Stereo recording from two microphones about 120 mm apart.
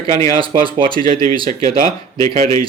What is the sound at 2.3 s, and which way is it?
Speech, 60° right (ahead or behind).